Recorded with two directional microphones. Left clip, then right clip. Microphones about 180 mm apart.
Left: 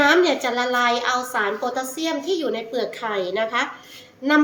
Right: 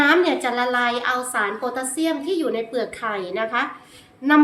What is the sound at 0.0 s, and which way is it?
A woman's voice, 10° right (ahead or behind).